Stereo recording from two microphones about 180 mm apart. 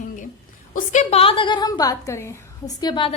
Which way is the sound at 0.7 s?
40° left (ahead or behind).